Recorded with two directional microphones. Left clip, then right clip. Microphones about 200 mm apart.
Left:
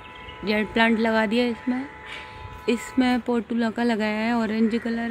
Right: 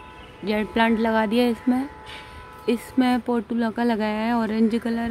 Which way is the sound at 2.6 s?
5° right (ahead or behind).